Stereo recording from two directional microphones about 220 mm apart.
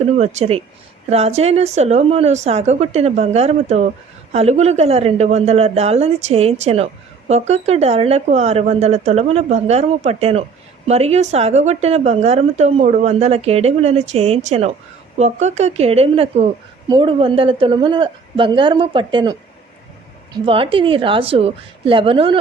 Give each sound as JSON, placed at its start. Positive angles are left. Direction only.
{"t": 0.2, "sound": "a woman's voice", "side_deg": -30}